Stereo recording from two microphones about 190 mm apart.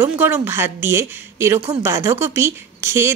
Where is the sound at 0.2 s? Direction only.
10° right (ahead or behind).